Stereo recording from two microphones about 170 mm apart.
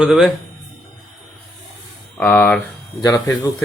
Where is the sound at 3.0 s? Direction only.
20° left (ahead or behind).